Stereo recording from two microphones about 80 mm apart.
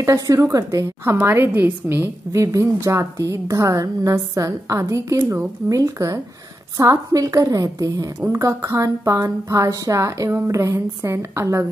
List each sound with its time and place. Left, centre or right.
0.0 s a woman's voice: right
1.2 s a woman's voice: right